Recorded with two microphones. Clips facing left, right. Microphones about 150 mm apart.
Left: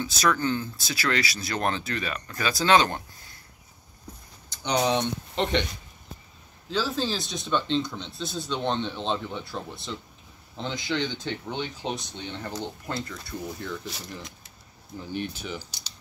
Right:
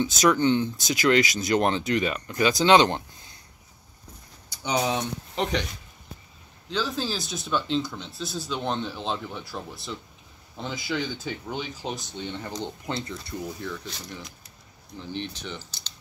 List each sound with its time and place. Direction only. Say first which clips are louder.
0.0 s speech: right 4 dB; 20° right (ahead or behind)
4.5 s speech: left 1 dB; 5° right (ahead or behind)
6.7 s speech: left 1 dB; centre (ahead or behind)
12.4 s speech: right 1 dB; 20° right (ahead or behind)
13.6 s speech: even; centre (ahead or behind)